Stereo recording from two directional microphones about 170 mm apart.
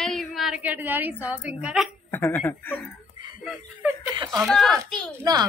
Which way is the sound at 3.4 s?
10° right (ahead or behind).